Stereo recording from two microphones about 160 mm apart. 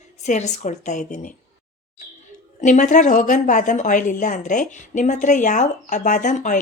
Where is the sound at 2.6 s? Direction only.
50° left (ahead or behind).